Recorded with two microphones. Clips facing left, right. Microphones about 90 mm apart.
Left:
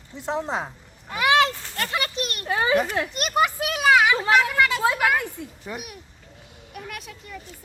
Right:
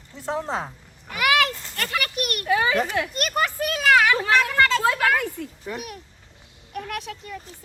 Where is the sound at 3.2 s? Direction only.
20° left (ahead or behind).